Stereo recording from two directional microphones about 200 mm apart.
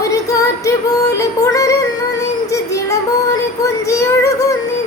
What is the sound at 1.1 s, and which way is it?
Music, 15° left (ahead or behind).